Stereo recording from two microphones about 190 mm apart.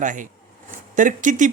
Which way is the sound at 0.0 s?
45° right (ahead or behind).